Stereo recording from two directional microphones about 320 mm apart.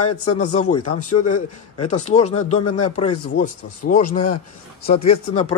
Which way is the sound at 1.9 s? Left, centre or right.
Left.